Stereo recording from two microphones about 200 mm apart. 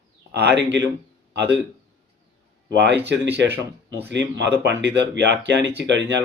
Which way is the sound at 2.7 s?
60° right (ahead or behind).